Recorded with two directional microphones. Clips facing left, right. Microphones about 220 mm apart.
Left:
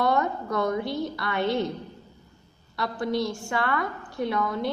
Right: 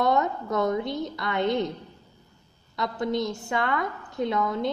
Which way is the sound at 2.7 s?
20° right (ahead or behind).